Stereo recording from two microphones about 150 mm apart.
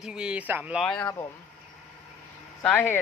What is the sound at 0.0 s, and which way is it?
Speech, 5° right (ahead or behind).